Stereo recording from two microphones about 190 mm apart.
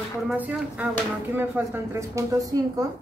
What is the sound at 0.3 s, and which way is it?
A woman's voice, 5° right (ahead or behind).